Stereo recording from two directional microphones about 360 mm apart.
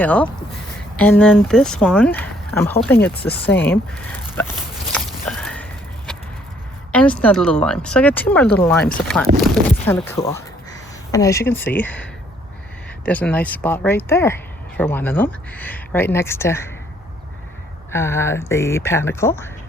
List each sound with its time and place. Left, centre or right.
0.0 s speech: centre
3.7 s dog: centre
6.9 s speech: centre
13.1 s speech: centre
17.9 s speech: centre